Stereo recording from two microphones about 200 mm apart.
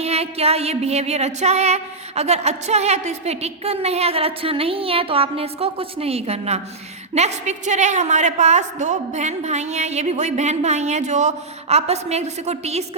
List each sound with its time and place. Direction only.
0.0 s music: 30° right (ahead or behind)